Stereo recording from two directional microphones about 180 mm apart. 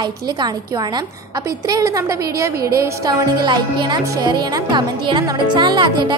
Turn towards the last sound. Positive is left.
turn(degrees=-25)  # may be behind; listen again after turning